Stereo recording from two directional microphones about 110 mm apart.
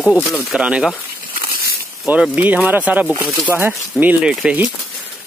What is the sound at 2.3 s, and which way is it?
Speech, 15° right (ahead or behind).